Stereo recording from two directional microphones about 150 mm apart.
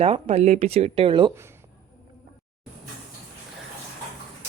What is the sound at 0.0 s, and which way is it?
Speech, 45° right (ahead or behind).